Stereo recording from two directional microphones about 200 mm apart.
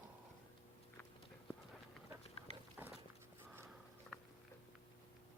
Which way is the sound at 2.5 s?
30° left (ahead or behind).